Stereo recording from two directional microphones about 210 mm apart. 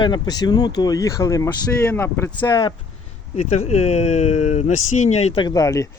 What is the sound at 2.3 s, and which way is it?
Speech, 20° left (ahead or behind).